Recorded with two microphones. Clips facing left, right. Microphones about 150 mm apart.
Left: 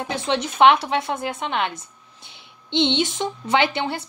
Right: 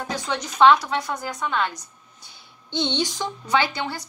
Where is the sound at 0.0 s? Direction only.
25° left (ahead or behind).